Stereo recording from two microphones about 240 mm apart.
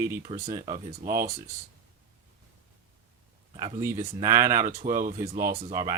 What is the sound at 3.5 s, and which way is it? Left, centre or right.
Speech, right.